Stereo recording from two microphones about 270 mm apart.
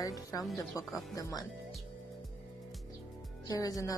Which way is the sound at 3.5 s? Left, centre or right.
Centre.